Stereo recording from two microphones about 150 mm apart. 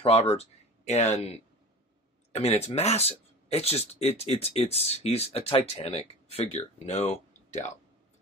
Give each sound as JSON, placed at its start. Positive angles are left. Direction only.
{"t": 0.0, "sound": "speech", "side_deg": 45}
{"t": 2.3, "sound": "speech", "side_deg": 45}